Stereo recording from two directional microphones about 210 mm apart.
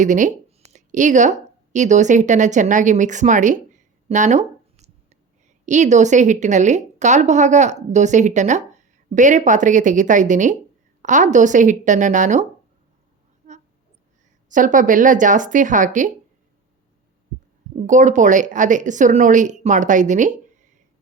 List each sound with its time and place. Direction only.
0.0 s a woman's voice: 35° right (ahead or behind)
13.4 s a sound: 35° right (ahead or behind)
14.5 s a woman's voice: 40° right (ahead or behind)
17.7 s a woman's voice: 35° right (ahead or behind)